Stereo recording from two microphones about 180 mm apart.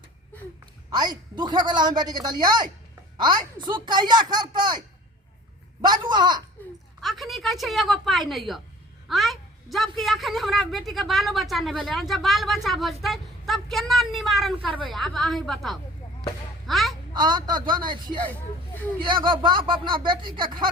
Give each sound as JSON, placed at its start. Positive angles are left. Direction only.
{"t": 0.9, "sound": "a man's voice", "side_deg": -25}
{"t": 5.8, "sound": "a man's voice", "side_deg": -25}
{"t": 7.0, "sound": "a man's voice", "side_deg": 0}
{"t": 17.2, "sound": "a man's voice", "side_deg": -25}